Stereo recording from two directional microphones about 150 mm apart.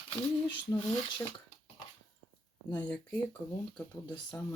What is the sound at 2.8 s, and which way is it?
Speech, 10° left (ahead or behind).